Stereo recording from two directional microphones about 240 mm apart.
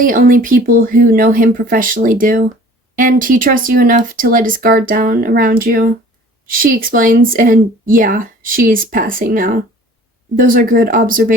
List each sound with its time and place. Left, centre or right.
0.0 s speech: right